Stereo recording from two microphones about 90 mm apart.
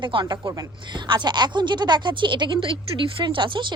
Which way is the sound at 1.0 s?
55° right (ahead or behind).